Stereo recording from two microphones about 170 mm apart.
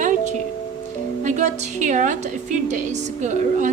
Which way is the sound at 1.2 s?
45° right (ahead or behind).